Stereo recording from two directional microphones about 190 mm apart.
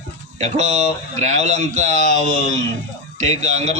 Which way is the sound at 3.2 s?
35° right (ahead or behind).